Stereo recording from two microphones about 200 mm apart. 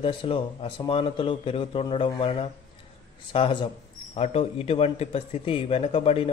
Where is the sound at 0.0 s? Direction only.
25° left (ahead or behind).